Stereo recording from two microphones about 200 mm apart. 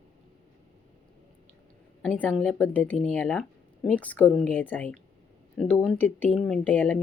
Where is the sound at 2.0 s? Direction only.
5° left (ahead or behind).